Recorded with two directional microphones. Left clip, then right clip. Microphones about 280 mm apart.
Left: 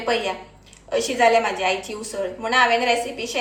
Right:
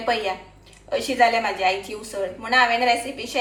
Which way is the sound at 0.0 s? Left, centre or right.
Centre.